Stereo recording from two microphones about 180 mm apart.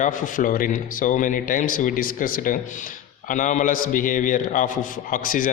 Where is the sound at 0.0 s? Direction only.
45° left (ahead or behind).